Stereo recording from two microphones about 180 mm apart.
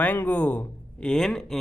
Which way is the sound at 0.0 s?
10° left (ahead or behind).